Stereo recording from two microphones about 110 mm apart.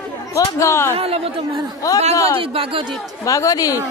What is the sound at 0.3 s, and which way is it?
Speech, 25° left (ahead or behind).